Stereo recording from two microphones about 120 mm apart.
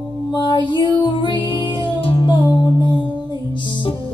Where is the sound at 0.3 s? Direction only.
40° left (ahead or behind).